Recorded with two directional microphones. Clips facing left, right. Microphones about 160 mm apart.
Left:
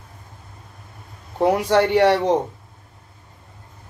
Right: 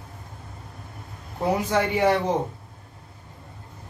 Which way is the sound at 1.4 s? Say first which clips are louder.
Left 6 dB; 75° left (ahead or behind).